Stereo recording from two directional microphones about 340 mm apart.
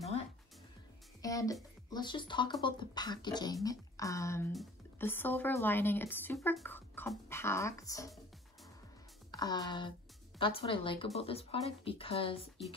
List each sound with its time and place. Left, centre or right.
1.2 s a woman's voice: centre
9.3 s a woman's voice: centre